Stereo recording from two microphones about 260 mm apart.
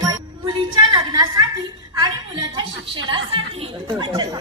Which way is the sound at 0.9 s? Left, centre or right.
Centre.